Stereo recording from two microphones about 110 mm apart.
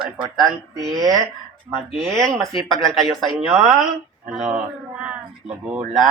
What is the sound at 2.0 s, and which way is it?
Speech, centre (ahead or behind).